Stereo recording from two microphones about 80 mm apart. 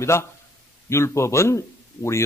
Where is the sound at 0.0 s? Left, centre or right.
Left.